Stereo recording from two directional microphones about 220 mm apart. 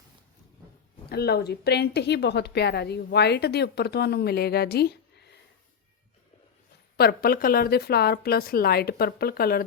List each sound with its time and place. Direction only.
1.1 s a woman's voice: 45° left (ahead or behind)
6.9 s a woman's voice: 45° left (ahead or behind)